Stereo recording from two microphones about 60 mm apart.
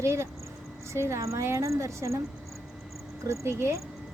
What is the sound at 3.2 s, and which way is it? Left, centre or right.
Speech, right.